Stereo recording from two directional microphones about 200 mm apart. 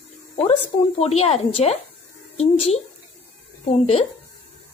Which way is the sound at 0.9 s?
30° left (ahead or behind).